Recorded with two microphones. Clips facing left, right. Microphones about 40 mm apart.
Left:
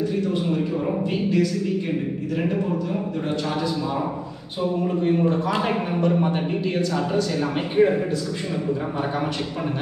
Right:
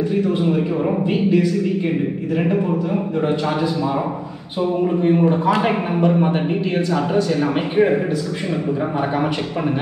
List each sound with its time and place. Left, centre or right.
0.1 s a man's voice: centre
4.8 s speech: right